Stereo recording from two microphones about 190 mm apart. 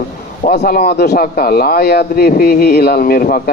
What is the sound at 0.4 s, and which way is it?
A man's voice, 55° left (ahead or behind).